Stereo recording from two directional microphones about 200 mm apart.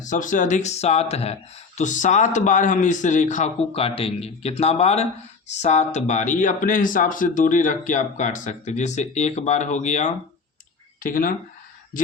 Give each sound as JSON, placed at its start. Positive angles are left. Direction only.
{"t": 0.0, "sound": "speech", "side_deg": 40}